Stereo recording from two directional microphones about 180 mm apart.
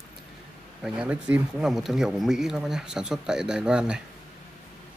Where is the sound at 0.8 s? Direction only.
5° right (ahead or behind).